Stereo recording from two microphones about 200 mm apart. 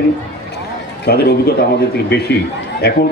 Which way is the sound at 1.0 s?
50° left (ahead or behind).